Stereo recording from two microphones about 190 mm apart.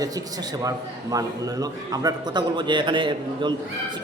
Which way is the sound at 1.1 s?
20° right (ahead or behind).